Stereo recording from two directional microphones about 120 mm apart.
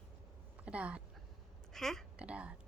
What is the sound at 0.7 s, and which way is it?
Speech, 10° right (ahead or behind).